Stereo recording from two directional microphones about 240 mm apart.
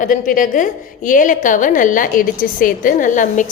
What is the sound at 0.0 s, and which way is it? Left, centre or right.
A woman's voice, left.